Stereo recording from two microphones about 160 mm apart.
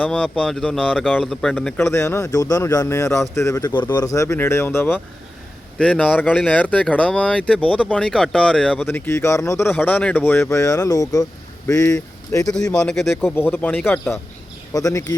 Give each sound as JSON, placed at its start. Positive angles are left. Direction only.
{"t": 0.0, "sound": "speech", "side_deg": 5}
{"t": 12.5, "sound": "speech", "side_deg": 5}
{"t": 13.3, "sound": "speech", "side_deg": 10}
{"t": 14.7, "sound": "speech", "side_deg": 20}